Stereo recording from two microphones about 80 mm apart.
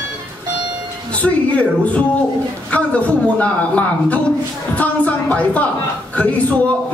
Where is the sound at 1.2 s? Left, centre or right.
Centre.